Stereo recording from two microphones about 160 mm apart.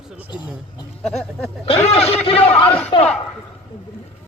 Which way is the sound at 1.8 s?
40° left (ahead or behind).